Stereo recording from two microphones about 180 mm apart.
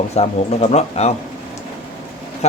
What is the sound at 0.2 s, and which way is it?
Speech, 35° left (ahead or behind).